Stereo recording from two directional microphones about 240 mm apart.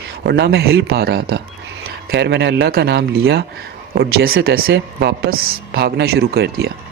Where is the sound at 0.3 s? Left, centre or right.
Right.